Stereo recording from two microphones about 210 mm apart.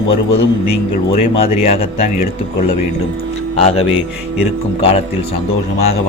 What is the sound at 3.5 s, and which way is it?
Speech, 30° left (ahead or behind).